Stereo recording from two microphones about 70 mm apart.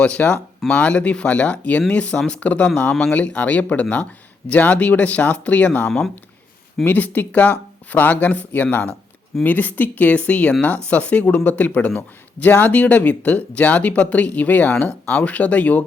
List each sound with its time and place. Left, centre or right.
0.0 s speech: centre